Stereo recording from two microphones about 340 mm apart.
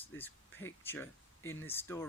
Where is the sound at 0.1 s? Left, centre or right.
Centre.